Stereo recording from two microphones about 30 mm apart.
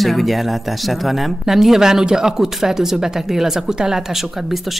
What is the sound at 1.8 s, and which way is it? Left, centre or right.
Speech, centre.